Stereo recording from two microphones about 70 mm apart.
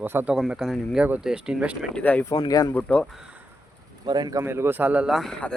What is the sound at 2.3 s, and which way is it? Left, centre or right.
Speech, left.